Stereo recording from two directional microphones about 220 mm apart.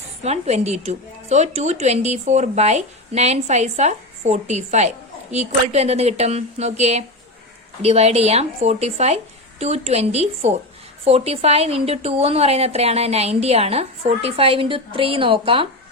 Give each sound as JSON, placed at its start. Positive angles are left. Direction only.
{"t": 0.2, "sound": "a woman's voice", "side_deg": -30}